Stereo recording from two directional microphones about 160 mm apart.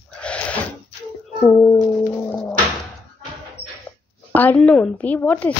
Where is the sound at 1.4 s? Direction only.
15° left (ahead or behind).